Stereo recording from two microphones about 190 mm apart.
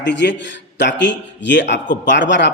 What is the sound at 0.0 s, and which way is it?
A man's voice, 65° left (ahead or behind).